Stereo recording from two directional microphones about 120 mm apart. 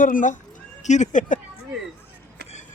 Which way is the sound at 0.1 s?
90° left.